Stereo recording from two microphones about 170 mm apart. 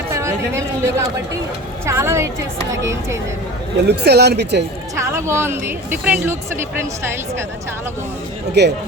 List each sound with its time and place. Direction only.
0.1 s speech: 15° right (ahead or behind)
3.8 s speech: 75° right (ahead or behind)
4.9 s speech: 15° right (ahead or behind)
8.6 s speech: 80° right